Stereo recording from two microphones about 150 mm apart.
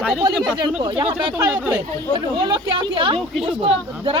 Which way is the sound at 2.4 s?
30° right (ahead or behind).